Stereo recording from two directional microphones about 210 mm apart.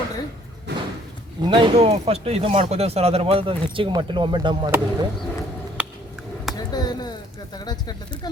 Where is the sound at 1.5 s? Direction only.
30° right (ahead or behind).